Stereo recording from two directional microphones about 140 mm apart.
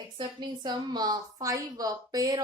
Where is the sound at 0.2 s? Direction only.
35° right (ahead or behind).